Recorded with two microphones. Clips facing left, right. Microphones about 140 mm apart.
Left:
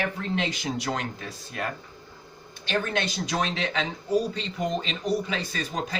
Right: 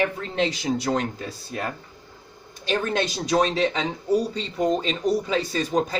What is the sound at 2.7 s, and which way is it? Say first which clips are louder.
Speech: right 3 dB; 40° right (ahead or behind).